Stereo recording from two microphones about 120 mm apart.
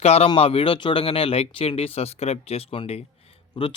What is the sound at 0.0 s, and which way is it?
Speech, 60° left (ahead or behind).